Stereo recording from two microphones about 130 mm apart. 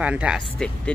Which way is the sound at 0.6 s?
5° left (ahead or behind).